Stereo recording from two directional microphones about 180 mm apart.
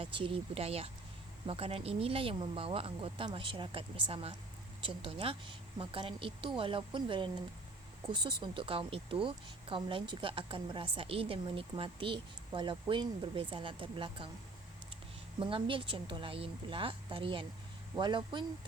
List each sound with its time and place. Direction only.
0.0 s speech: 30° right (ahead or behind)
15.4 s speech: 30° right (ahead or behind)